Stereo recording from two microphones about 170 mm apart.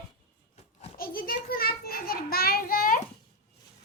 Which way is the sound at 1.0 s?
60° left (ahead or behind).